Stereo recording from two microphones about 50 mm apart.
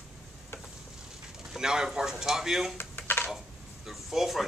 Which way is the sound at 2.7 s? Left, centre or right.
Left.